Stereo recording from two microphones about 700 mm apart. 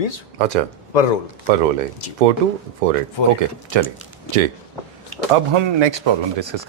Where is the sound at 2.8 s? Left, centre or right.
Right.